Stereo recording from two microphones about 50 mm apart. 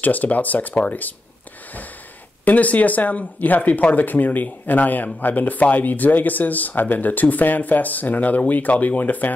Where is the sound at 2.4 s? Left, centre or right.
Left.